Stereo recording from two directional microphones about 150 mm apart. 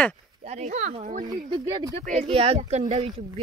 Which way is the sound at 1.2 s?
25° right (ahead or behind).